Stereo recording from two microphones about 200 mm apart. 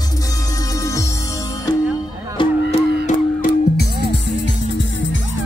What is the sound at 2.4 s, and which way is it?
Music, 30° left (ahead or behind).